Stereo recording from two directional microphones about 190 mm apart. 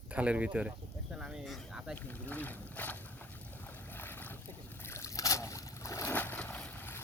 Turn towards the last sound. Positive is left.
turn(degrees=10)  # may be behind; listen again after turning